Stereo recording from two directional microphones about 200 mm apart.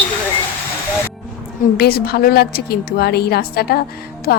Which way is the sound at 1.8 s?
50° left (ahead or behind).